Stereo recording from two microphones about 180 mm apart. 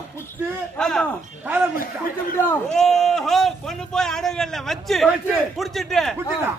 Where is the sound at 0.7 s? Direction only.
5° left (ahead or behind).